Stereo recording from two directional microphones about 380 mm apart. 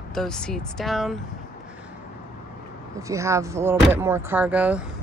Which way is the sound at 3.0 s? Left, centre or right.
Centre.